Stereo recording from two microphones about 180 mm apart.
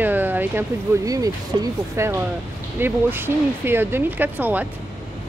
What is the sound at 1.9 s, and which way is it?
Speech, 15° right (ahead or behind).